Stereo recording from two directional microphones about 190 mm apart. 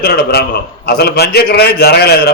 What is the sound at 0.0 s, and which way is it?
A man's voice, 55° left (ahead or behind).